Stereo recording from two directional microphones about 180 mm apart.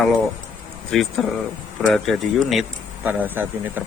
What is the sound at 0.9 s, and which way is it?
Speech, centre (ahead or behind).